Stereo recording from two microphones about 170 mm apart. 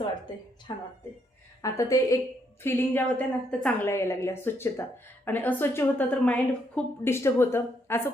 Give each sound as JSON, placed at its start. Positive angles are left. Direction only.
{"t": 0.7, "sound": "a woman's voice", "side_deg": 30}
{"t": 1.6, "sound": "a woman's voice", "side_deg": 20}